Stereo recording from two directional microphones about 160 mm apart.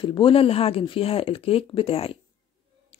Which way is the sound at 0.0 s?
30° left (ahead or behind).